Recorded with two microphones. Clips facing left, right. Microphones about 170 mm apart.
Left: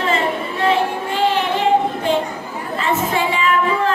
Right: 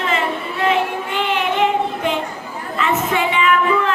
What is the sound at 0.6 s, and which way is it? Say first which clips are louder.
Child singing: left 1 dB; 35° left (ahead or behind).